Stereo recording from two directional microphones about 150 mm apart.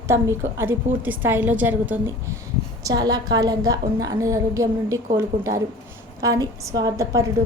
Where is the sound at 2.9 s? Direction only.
25° right (ahead or behind).